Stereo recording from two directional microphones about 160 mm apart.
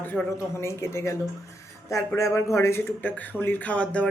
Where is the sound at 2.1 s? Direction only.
20° left (ahead or behind).